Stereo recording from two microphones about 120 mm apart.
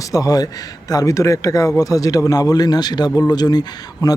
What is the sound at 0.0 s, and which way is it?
Speech, 30° left (ahead or behind).